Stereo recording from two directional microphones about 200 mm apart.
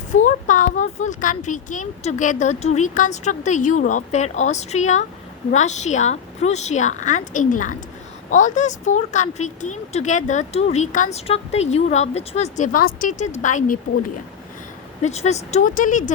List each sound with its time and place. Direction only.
0.3 s a woman's voice: 40° left (ahead or behind)
15.0 s a woman's voice: 35° left (ahead or behind)